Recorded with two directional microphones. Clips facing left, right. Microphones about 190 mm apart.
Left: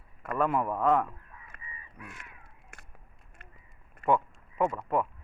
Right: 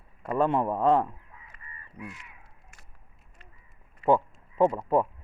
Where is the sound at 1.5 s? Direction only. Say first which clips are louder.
Right 6 dB; 50° left (ahead or behind).